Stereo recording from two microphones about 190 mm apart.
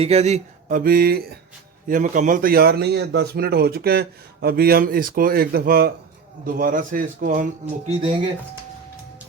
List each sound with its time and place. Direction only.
0.0 s speech: 35° right (ahead or behind); by 1.4 s 55° right (ahead or behind)
1.9 s speech: 45° right (ahead or behind)
7.9 s speech: 25° right (ahead or behind)